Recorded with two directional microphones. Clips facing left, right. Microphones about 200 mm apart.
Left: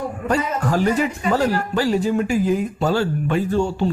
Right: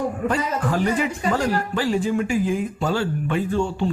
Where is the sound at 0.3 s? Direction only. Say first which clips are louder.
Left 5 dB; 40° left (ahead or behind).